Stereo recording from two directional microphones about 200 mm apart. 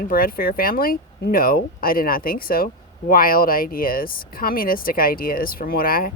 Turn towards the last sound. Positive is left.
turn(degrees=45)  # may be behind; listen again after turning